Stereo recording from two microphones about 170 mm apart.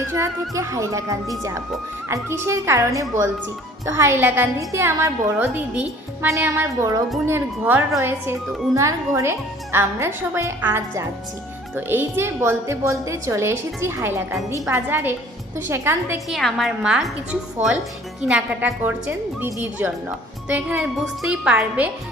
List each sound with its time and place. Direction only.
0.1 s a woman's voice: 15° right (ahead or behind)
16.3 s a woman's voice: centre (ahead or behind)
18.2 s a woman's voice: 5° right (ahead or behind)